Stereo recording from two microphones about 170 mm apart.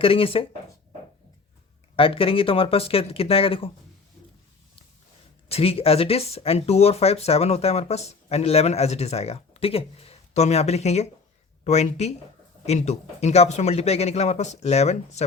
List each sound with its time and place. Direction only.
0.0 s speech: 35° left (ahead or behind)
2.0 s speech: 30° left (ahead or behind)
5.5 s speech: 35° left (ahead or behind)